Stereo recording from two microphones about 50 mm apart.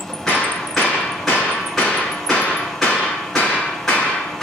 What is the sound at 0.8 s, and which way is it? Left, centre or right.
Hammer, left.